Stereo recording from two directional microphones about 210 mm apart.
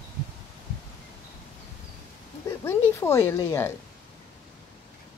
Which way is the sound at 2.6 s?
10° left (ahead or behind).